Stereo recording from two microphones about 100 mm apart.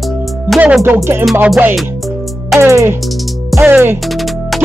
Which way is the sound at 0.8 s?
25° right (ahead or behind).